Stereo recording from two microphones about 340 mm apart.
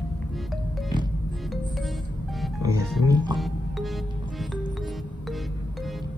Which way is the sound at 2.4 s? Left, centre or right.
Centre.